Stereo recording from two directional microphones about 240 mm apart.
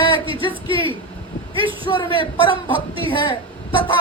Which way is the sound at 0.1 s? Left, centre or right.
Right.